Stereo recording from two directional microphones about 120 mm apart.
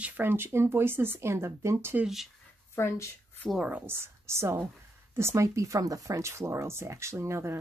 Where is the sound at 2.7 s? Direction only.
20° left (ahead or behind).